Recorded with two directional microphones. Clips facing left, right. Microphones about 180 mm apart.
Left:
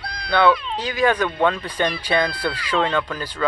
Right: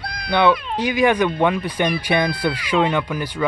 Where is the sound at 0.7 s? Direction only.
15° right (ahead or behind).